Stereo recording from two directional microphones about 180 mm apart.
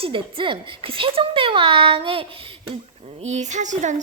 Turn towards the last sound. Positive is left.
turn(degrees=-40)  # may be behind; listen again after turning